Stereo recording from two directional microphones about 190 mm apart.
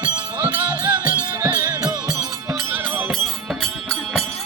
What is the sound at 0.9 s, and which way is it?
Music, 20° right (ahead or behind).